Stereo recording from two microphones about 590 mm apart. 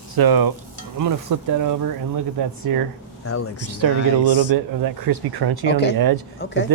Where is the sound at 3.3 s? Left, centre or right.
Left.